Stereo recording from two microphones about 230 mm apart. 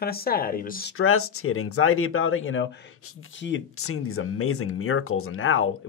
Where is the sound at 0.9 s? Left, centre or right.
Left.